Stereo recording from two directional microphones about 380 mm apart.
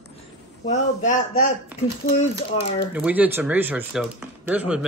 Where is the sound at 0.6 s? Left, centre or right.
Centre.